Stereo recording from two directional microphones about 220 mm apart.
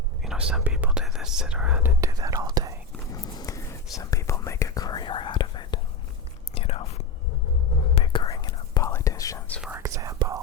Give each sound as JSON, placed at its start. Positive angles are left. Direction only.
{"t": 0.2, "sound": "speech", "side_deg": -5}
{"t": 3.1, "sound": "whispering", "side_deg": 15}
{"t": 9.6, "sound": "whispering", "side_deg": -10}